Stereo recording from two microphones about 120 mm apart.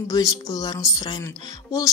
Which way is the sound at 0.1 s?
30° left (ahead or behind).